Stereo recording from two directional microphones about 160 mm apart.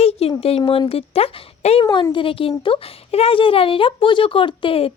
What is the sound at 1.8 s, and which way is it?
Speech, 25° left (ahead or behind).